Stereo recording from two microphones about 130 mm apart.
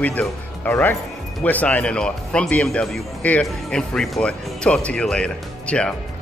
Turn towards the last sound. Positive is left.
turn(degrees=10)  # may be behind; listen again after turning